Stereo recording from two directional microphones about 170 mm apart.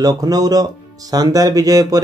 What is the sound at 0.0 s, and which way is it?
Speech, 20° right (ahead or behind).